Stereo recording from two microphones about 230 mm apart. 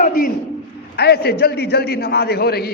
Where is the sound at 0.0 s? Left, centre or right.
Left.